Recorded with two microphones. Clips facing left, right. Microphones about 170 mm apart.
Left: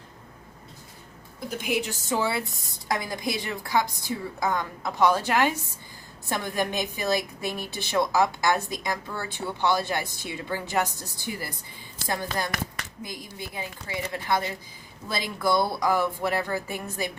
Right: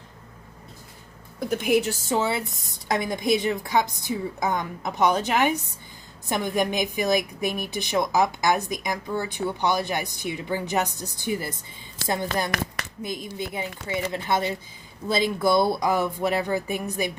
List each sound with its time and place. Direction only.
1.5 s a woman's voice: 55° right (ahead or behind)
2.0 s a woman's voice: 25° right (ahead or behind)